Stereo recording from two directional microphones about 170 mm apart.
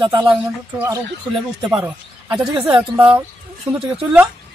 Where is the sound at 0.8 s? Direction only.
20° right (ahead or behind).